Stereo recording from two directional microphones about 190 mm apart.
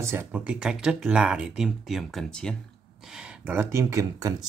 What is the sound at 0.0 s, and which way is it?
Speech, 15° right (ahead or behind).